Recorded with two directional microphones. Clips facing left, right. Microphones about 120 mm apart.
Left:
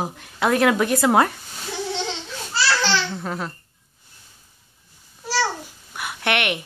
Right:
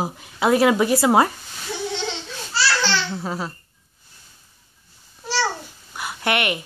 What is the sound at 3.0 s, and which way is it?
Laughter, 5° right (ahead or behind).